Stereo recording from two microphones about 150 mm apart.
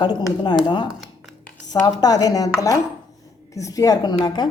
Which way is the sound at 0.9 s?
Centre (ahead or behind).